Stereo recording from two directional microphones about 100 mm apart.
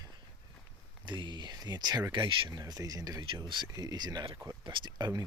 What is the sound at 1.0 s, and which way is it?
Speech, 50° right (ahead or behind).